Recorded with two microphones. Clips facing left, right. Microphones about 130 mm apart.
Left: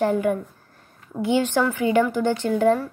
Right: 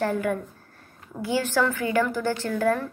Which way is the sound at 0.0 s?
20° left (ahead or behind).